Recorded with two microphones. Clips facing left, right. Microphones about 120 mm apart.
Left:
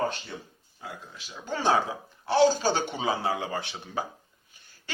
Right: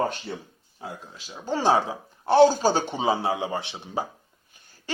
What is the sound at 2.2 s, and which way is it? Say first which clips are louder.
Speech: right 5 dB; 50° right (ahead or behind).